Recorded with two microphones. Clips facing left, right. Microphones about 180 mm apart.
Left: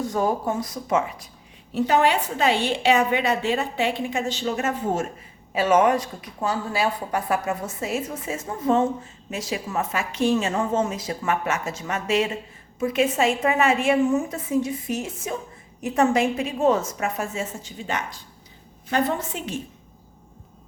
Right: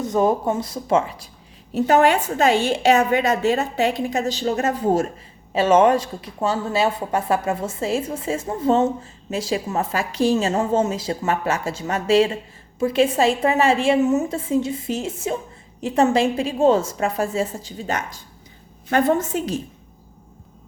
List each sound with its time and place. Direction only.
0.0 s a woman's voice: 20° right (ahead or behind)
1.7 s a woman's voice: 45° right (ahead or behind)
18.9 s a woman's voice: 50° right (ahead or behind)